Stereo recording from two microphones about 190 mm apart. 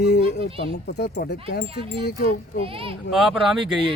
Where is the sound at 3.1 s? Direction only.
Centre (ahead or behind).